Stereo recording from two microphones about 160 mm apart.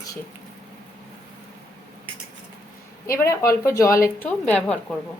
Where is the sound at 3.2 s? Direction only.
15° left (ahead or behind).